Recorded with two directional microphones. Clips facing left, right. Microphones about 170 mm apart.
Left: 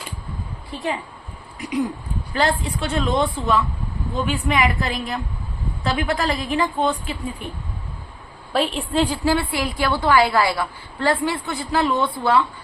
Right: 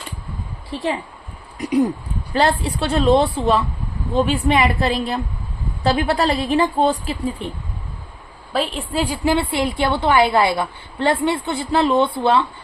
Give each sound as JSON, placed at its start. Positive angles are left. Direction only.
{"t": 1.5, "sound": "a sound", "side_deg": -40}
{"t": 2.3, "sound": "a woman's voice", "side_deg": -30}
{"t": 8.5, "sound": "a woman's voice", "side_deg": 0}
{"t": 9.2, "sound": "a woman's voice", "side_deg": -25}